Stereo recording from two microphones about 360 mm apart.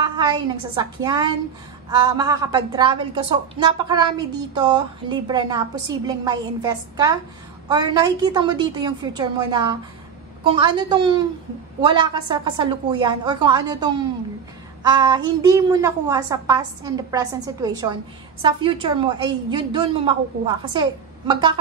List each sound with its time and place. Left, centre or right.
0.0 s a woman's voice: centre